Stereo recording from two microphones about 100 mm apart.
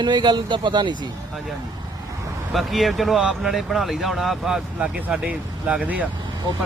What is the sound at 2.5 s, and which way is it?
Speech, centre (ahead or behind).